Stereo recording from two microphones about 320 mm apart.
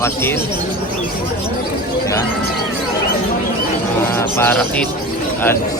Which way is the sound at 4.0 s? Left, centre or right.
Centre.